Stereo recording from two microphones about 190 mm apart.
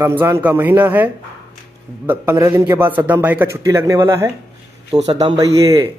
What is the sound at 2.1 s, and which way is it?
Speech, 15° right (ahead or behind).